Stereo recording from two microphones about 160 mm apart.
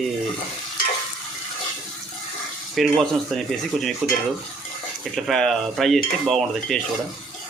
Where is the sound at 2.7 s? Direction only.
Centre (ahead or behind).